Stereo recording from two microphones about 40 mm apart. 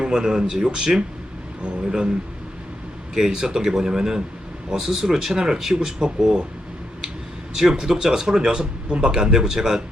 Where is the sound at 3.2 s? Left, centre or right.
Centre.